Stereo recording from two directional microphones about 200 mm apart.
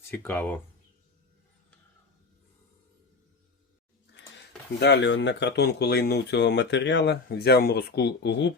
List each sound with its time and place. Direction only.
0.1 s speech: 10° left (ahead or behind)
4.8 s speech: 60° left (ahead or behind)